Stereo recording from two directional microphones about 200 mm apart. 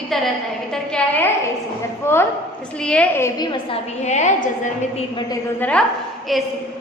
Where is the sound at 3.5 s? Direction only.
30° left (ahead or behind).